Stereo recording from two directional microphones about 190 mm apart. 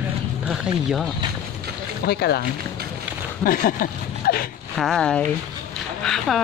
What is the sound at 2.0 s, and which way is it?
Speech, 55° left (ahead or behind).